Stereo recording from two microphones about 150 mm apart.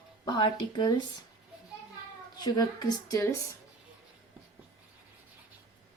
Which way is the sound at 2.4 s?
25° left (ahead or behind).